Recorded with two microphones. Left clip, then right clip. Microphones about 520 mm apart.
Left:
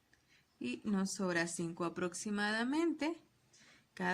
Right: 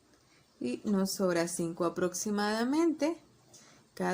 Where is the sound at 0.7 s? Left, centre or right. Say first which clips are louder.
Right 7 dB; left.